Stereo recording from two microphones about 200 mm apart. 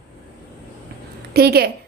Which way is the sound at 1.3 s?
50° right (ahead or behind).